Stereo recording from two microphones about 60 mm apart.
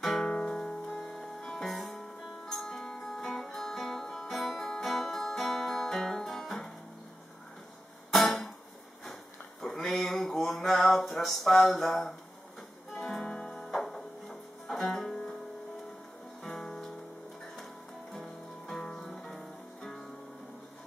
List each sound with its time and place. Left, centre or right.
0.2 s music: centre
0.5 s music: centre
8.1 s music: centre
9.6 s a sound: centre
12.9 s music: centre
16.4 s music: centre
18.1 s music: centre